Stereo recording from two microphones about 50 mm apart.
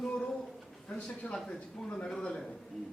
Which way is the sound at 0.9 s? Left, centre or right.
Centre.